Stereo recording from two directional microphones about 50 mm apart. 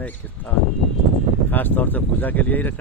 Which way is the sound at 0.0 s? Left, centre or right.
Left.